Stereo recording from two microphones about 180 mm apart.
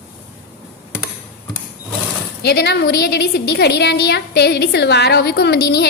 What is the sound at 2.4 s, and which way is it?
A woman's voice, 65° left (ahead or behind).